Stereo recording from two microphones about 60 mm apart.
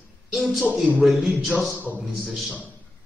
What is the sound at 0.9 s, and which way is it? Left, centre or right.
Speech, centre.